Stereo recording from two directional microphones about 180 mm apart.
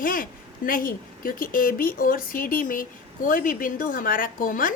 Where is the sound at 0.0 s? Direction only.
50° left (ahead or behind).